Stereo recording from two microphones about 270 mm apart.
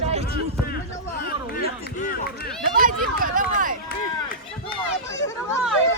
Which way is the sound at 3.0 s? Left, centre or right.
Right.